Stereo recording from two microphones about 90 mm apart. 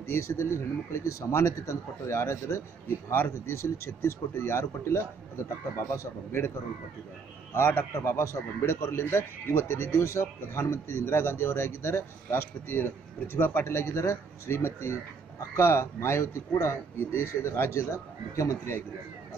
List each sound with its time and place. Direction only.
0.0 s speech: 30° left (ahead or behind)
7.5 s speech: 25° left (ahead or behind)